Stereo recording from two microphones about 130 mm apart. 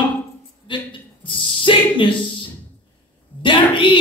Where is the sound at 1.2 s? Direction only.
40° left (ahead or behind).